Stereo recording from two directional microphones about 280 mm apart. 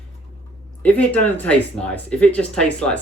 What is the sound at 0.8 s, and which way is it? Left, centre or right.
Speech, centre.